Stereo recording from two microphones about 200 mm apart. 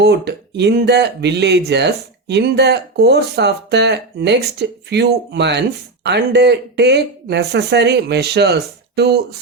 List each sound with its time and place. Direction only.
0.0 s speech: 55° right (ahead or behind)